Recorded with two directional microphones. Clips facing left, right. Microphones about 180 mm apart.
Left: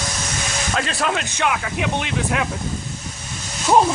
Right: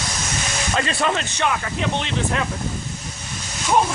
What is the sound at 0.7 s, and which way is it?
Speech, centre (ahead or behind).